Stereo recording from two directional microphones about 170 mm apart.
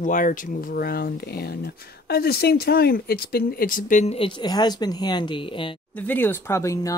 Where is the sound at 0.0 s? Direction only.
50° left (ahead or behind); by 5.8 s 30° left (ahead or behind).